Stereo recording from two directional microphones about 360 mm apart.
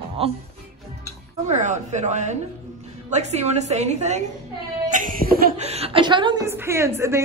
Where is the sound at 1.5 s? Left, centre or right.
Centre.